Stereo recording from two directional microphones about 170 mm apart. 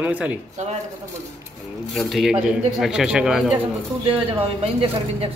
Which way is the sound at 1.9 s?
Centre (ahead or behind).